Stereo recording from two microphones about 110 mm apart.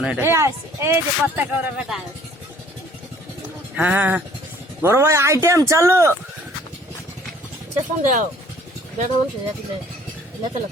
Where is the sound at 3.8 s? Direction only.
15° right (ahead or behind).